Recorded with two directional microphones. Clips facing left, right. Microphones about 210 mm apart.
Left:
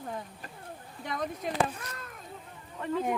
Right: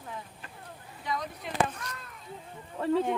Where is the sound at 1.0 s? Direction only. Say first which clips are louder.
Left 1 dB; 50° left (ahead or behind).